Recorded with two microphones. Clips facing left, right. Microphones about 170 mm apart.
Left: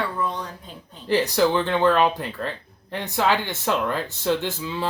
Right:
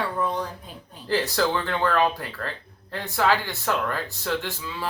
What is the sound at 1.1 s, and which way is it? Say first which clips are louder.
Speech: left 4 dB; 20° left (ahead or behind).